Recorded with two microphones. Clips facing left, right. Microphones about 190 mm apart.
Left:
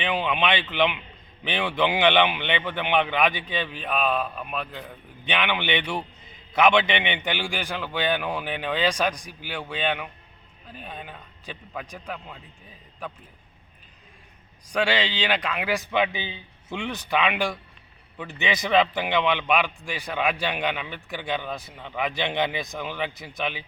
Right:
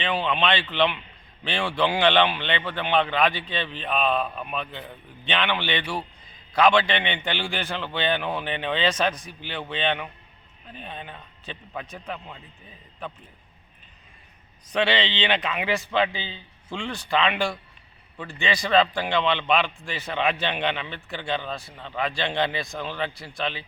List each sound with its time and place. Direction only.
0.0 s a man's voice: 15° left (ahead or behind)
5.2 s a man's voice: 15° left (ahead or behind)
14.7 s a man's voice: 10° left (ahead or behind)
15.4 s speech: 5° right (ahead or behind)
15.8 s a man's voice: 15° left (ahead or behind)